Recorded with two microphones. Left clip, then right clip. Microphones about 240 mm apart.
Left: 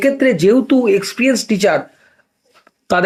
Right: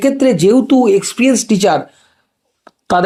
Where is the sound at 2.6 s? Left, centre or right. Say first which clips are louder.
Right 2 dB; centre.